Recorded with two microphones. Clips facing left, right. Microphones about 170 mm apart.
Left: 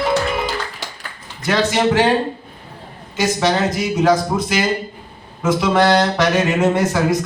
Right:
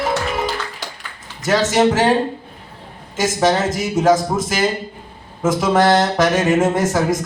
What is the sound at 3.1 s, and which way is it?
Speech, 45° right (ahead or behind).